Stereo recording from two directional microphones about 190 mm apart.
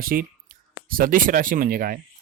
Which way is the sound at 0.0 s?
50° right (ahead or behind).